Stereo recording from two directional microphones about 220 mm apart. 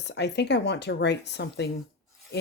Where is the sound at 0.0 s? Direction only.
50° left (ahead or behind).